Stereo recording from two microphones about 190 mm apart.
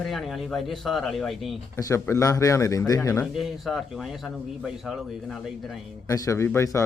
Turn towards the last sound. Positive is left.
turn(degrees=15)  # may be behind; listen again after turning